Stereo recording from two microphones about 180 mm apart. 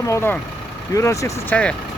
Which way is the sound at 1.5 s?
5° left (ahead or behind).